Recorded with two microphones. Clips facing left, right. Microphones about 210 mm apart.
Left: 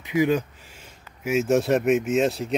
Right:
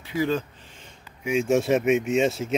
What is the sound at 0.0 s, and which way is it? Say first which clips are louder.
Speech: left 4 dB; 15° left (ahead or behind).